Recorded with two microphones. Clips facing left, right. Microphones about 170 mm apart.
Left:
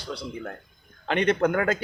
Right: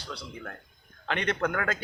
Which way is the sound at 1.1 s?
15° left (ahead or behind).